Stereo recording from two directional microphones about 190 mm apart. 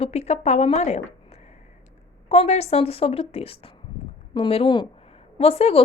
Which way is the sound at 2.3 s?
35° left (ahead or behind).